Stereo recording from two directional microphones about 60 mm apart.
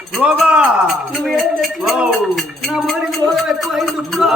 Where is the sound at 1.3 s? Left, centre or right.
Centre.